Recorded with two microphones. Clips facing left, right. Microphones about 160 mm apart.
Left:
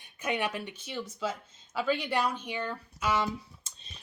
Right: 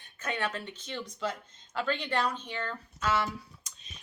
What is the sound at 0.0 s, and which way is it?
Speech, 15° left (ahead or behind).